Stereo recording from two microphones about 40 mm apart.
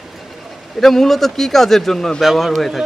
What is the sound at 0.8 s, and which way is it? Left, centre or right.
A man's voice, centre.